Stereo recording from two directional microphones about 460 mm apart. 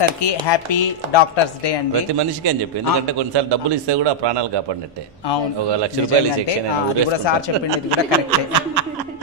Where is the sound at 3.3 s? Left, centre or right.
Right.